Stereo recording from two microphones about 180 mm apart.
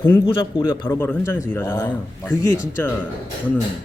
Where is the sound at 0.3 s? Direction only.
25° left (ahead or behind).